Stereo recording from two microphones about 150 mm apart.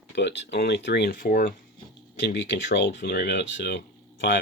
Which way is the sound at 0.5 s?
90° left.